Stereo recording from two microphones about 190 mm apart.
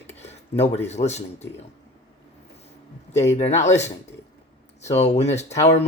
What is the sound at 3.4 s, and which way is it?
Speech, 35° left (ahead or behind).